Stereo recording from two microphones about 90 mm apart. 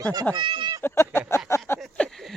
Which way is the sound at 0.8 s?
30° left (ahead or behind).